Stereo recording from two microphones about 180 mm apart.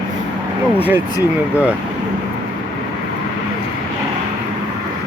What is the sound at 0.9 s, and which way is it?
Speech, 20° left (ahead or behind).